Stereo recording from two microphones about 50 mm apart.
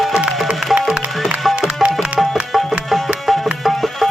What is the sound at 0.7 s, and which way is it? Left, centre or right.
Music, centre.